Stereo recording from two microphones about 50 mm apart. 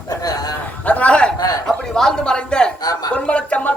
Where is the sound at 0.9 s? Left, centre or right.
Left.